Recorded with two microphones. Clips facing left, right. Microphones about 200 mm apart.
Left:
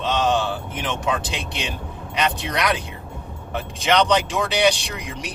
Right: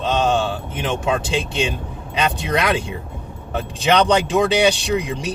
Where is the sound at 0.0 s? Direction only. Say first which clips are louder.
Right 2 dB; 30° right (ahead or behind).